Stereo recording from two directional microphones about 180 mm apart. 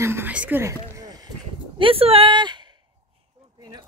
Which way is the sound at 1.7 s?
30° right (ahead or behind).